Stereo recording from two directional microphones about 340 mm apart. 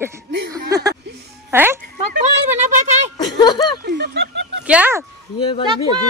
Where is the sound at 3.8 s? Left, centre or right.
Right.